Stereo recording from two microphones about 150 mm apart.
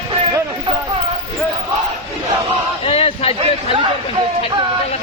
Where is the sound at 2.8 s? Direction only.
40° left (ahead or behind).